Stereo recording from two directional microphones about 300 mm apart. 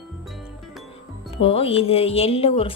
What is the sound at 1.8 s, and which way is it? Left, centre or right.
Speech, centre.